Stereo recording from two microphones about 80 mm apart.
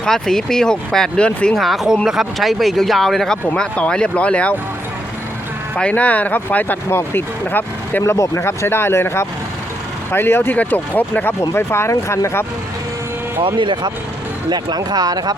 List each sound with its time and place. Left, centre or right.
0.0 s speech: centre
1.5 s speech: centre
5.7 s speech: centre
8.1 s speech: left
11.3 s speech: left
13.4 s speech: right
14.5 s speech: right